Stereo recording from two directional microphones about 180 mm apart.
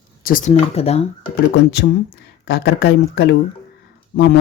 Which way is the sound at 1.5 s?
75° left (ahead or behind).